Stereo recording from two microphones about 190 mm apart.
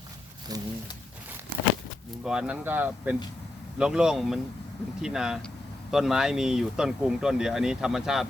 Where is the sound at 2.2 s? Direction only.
5° right (ahead or behind).